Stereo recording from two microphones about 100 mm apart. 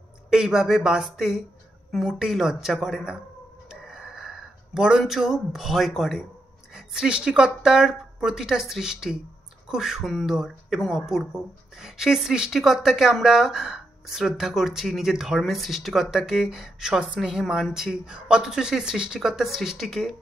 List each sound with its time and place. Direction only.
0.3 s speech: 5° right (ahead or behind)